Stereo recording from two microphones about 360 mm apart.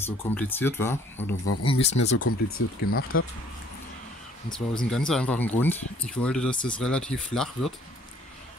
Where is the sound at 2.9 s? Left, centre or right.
Left.